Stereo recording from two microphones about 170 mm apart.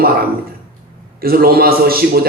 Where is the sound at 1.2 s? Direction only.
60° right (ahead or behind).